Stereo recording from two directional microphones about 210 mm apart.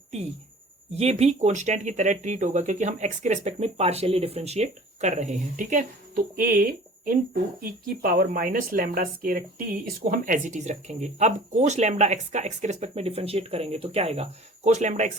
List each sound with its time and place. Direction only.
0.9 s speech: 30° right (ahead or behind)